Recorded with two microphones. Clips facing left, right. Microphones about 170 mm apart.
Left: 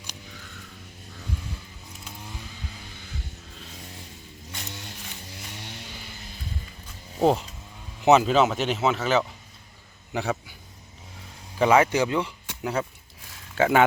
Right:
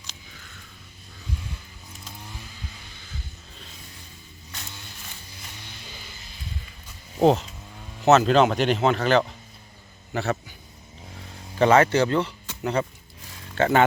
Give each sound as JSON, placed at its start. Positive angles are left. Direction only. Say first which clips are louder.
{"t": 5.5, "sound": "vehicle", "louder": "left 5 dB", "side_deg": 70}
{"t": 7.2, "sound": "speech", "louder": "right 3 dB", "side_deg": 5}
{"t": 10.1, "sound": "a sound", "louder": "right 1 dB", "side_deg": 10}
{"t": 11.6, "sound": "speech", "louder": "right 2 dB", "side_deg": 10}